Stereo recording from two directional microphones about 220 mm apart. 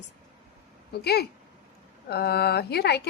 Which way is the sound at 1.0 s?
45° left (ahead or behind).